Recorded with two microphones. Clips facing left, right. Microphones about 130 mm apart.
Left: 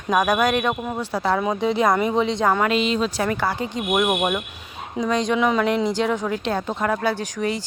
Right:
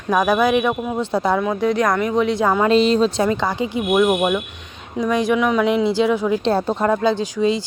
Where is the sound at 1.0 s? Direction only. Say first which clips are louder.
Right 4 dB; 25° right (ahead or behind).